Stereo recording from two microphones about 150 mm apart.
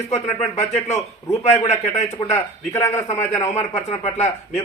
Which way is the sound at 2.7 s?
15° left (ahead or behind).